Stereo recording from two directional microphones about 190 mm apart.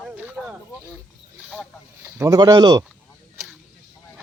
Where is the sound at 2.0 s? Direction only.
10° right (ahead or behind).